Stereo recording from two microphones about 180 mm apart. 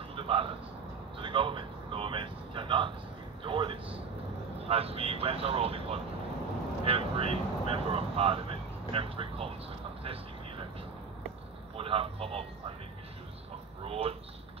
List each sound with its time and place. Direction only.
0.1 s a sound: 30° right (ahead or behind)
3.4 s a man's voice: 30° right (ahead or behind)
11.7 s speech: 30° right (ahead or behind)
13.8 s speech: 35° right (ahead or behind)